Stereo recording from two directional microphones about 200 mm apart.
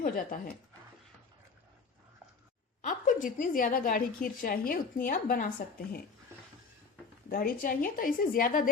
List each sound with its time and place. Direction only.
0.0 s speech: 45° left (ahead or behind)
2.8 s a woman's voice: 40° left (ahead or behind)
6.3 s a sound: 10° right (ahead or behind)
7.3 s a woman's voice: 45° left (ahead or behind)